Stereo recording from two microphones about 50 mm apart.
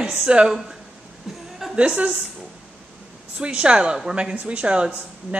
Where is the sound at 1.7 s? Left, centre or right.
Right.